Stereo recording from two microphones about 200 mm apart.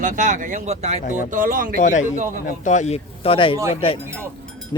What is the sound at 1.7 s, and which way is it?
A man's voice, 40° left (ahead or behind).